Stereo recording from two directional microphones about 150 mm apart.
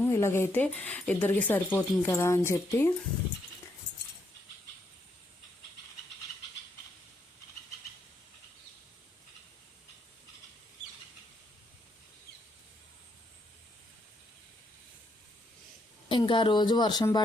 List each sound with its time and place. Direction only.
0.1 s speech: 15° left (ahead or behind)
16.0 s speech: 35° left (ahead or behind)